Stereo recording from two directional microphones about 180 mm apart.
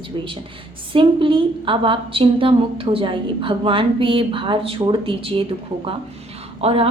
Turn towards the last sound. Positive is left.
turn(degrees=-35)  # may be behind; listen again after turning